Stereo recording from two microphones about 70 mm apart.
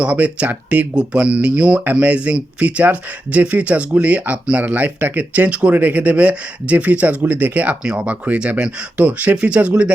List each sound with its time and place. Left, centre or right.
0.0 s speech: centre